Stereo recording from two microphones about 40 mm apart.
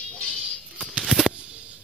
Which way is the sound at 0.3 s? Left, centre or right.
Centre.